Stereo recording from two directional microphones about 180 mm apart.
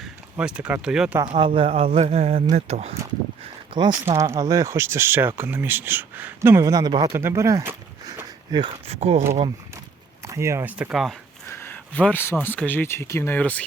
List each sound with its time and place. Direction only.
0.0 s speech: 5° right (ahead or behind)
1.3 s a man's voice: 30° right (ahead or behind)
3.8 s speech: 25° right (ahead or behind)
8.6 s a man's voice: 35° right (ahead or behind)
10.2 s speech: 15° right (ahead or behind)
11.4 s speech: 15° left (ahead or behind)